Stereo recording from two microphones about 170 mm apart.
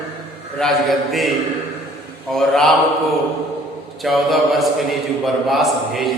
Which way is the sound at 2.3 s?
Centre (ahead or behind).